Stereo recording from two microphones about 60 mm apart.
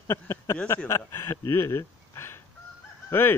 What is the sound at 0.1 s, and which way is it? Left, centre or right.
A man's voice, left.